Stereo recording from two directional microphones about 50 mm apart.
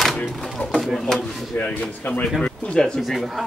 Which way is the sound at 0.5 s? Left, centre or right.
Centre.